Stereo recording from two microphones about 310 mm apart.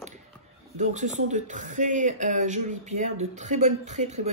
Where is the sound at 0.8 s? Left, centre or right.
Right.